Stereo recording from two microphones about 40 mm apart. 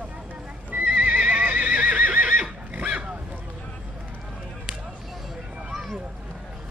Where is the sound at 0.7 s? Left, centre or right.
Right.